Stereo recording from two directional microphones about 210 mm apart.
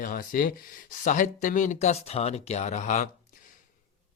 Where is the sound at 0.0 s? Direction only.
40° left (ahead or behind).